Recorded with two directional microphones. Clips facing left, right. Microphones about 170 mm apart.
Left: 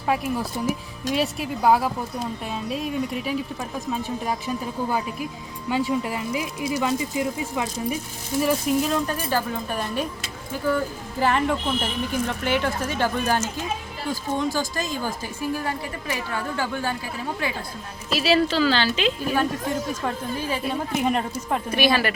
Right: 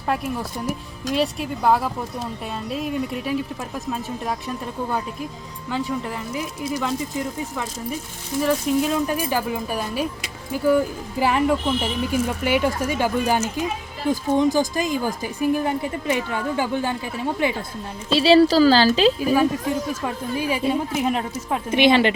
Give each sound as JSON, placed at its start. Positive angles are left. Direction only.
{"t": 0.1, "sound": "speech", "side_deg": 0}
{"t": 9.0, "sound": "a woman's voice", "side_deg": -10}
{"t": 19.2, "sound": "speech", "side_deg": -5}
{"t": 20.9, "sound": "speech", "side_deg": 0}
{"t": 21.7, "sound": "a woman's voice", "side_deg": -20}